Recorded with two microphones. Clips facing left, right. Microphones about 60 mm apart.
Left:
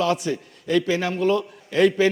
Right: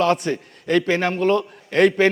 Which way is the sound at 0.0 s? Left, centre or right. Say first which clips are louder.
Right 3 dB; right.